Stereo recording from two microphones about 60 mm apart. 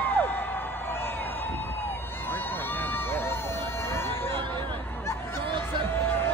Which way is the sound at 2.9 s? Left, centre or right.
Left.